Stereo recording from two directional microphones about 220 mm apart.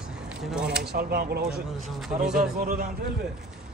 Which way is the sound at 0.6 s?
50° right (ahead or behind).